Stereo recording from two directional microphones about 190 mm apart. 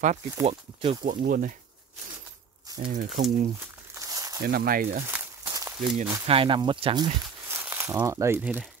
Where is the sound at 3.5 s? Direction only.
15° right (ahead or behind).